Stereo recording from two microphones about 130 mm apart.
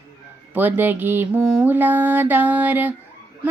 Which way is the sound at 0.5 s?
15° right (ahead or behind).